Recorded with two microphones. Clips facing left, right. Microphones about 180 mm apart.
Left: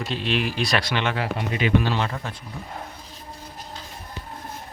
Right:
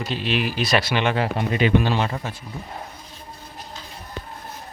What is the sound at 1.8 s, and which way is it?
Speech, 15° right (ahead or behind).